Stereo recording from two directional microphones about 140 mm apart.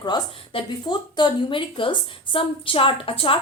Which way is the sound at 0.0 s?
30° left (ahead or behind).